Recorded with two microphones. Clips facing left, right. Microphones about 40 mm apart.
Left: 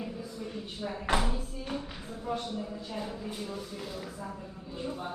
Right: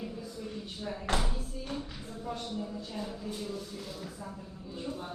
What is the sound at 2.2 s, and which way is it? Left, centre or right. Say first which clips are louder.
Speech: left 3 dB; centre.